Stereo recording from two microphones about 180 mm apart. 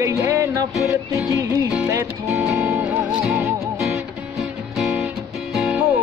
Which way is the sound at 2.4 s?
10° right (ahead or behind).